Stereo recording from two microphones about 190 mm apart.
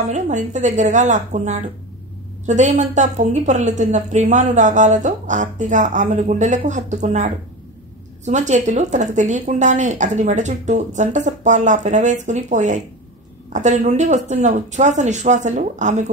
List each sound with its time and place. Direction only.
0.1 s a woman's voice: 40° right (ahead or behind)